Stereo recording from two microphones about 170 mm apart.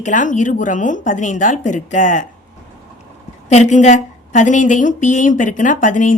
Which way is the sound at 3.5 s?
45° left (ahead or behind).